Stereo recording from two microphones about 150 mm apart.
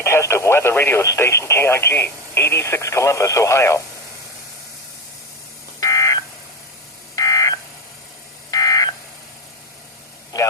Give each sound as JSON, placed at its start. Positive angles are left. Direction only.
{"t": 0.0, "sound": "speech", "side_deg": 20}
{"t": 5.8, "sound": "telephone dialing", "side_deg": 20}
{"t": 7.2, "sound": "telephone dialing", "side_deg": 25}